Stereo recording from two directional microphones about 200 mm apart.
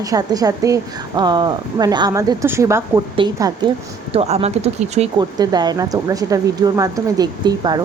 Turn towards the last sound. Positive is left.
turn(degrees=-20)  # may be behind; listen again after turning